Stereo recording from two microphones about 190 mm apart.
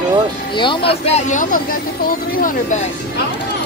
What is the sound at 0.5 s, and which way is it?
Speech, 25° left (ahead or behind).